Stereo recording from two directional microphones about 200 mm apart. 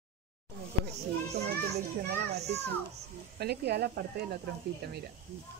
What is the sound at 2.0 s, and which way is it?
Speech, 50° right (ahead or behind).